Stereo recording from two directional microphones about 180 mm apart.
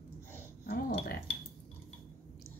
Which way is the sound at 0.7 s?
55° left (ahead or behind).